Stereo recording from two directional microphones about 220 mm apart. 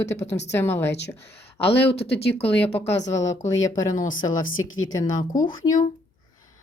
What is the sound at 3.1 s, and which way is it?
Speech, 15° left (ahead or behind).